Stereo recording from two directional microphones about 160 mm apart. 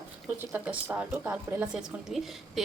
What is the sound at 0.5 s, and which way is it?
A woman's voice, 10° right (ahead or behind).